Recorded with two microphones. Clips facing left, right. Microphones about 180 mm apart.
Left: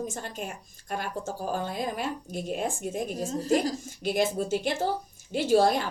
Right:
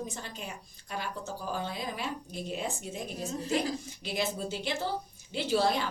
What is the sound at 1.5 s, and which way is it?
A woman's voice, 50° left (ahead or behind).